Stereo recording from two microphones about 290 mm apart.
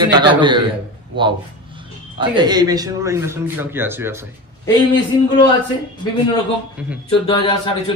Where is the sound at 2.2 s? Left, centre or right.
Centre.